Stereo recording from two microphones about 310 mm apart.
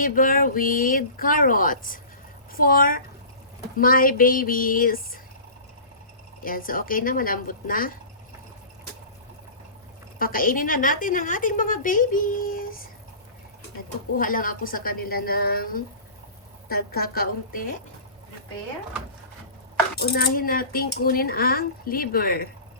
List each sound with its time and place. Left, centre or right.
0.0 s a woman's voice: left
6.4 s a woman's voice: left
10.2 s a woman's voice: left
14.2 s a woman's voice: left
20.0 s a woman's voice: left